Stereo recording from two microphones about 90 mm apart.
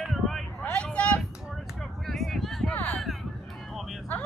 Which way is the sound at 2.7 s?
15° left (ahead or behind).